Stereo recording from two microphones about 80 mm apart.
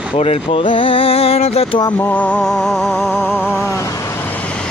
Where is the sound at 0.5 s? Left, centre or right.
Left.